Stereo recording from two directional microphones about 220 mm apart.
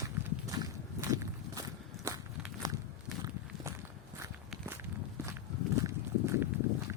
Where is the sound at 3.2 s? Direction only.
15° right (ahead or behind).